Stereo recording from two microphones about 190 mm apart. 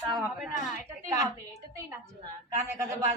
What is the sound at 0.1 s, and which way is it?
Speech, 5° right (ahead or behind).